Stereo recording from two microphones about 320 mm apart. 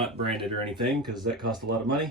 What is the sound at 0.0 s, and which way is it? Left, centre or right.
Speech, centre.